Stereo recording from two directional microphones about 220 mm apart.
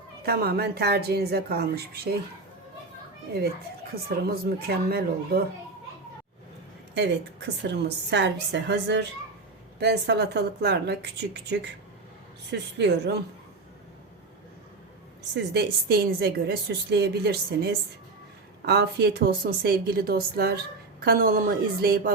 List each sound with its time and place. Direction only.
0.2 s a woman's voice: 45° right (ahead or behind)
4.3 s a woman's voice: 45° right (ahead or behind)
6.9 s a woman's voice: 50° right (ahead or behind)
15.4 s a woman's voice: 45° right (ahead or behind)